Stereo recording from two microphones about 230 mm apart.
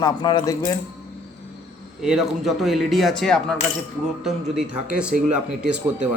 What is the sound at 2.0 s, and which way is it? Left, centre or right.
Speech, centre.